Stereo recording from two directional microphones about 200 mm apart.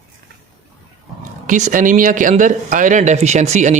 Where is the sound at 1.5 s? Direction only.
40° right (ahead or behind).